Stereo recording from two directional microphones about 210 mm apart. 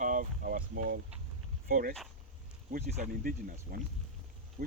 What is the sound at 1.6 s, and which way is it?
Speech, 45° right (ahead or behind).